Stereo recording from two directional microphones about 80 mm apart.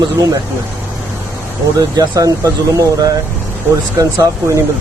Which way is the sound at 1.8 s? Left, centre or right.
Right.